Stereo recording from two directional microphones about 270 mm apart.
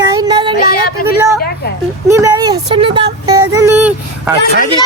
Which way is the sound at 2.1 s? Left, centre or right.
Centre.